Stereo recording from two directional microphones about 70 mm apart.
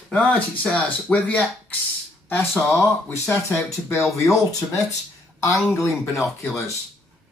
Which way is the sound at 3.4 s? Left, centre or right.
Left.